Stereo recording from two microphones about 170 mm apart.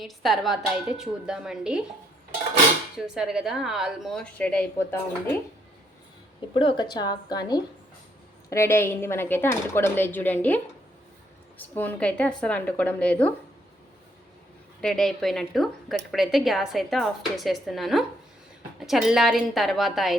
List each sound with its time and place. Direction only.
0.0 s a woman's voice: centre (ahead or behind)
3.2 s a woman's voice: 5° right (ahead or behind)
6.5 s a woman's voice: 30° left (ahead or behind); by 13.3 s 10° left (ahead or behind)
14.8 s a woman's voice: 5° left (ahead or behind)